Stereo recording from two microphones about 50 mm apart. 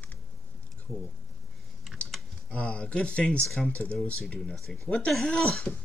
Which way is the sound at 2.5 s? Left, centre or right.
Left.